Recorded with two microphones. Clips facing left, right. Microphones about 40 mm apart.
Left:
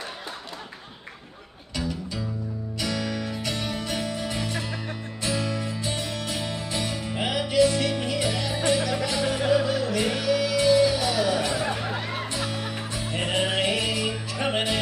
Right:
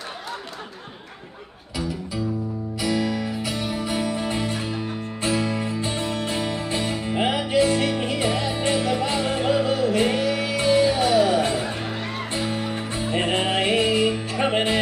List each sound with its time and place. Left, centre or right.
2.8 s music: centre; by 14.8 s right